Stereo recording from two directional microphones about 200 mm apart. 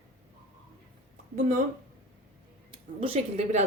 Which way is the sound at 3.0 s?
30° right (ahead or behind).